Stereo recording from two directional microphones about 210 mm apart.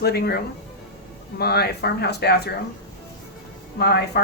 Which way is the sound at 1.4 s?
50° left (ahead or behind).